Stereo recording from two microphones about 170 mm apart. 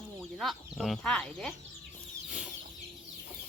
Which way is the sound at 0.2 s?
Centre (ahead or behind).